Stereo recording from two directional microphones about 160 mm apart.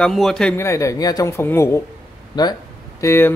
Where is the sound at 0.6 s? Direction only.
20° left (ahead or behind).